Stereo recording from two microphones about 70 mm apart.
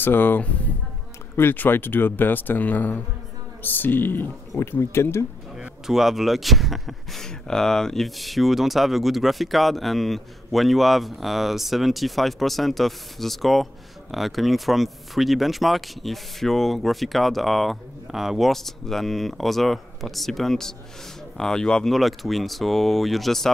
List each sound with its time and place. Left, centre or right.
0.0 s speech: left
5.6 s speech: centre